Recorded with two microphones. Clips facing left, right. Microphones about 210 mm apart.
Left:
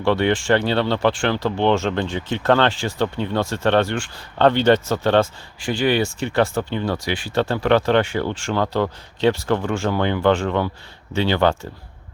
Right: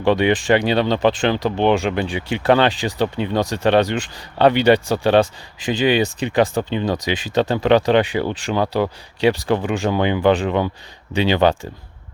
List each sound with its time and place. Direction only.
0.0 s speech: 15° right (ahead or behind)